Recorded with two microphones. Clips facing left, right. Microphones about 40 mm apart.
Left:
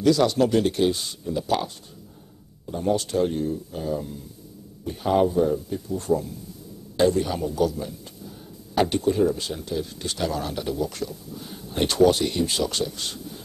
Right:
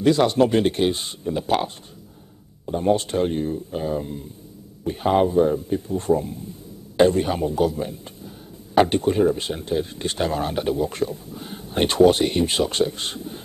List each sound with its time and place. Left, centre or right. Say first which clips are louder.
0.0 s speech: right 2 dB; right